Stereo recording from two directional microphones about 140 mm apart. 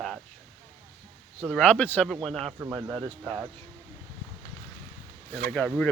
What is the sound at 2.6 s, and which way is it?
Speech, 15° right (ahead or behind).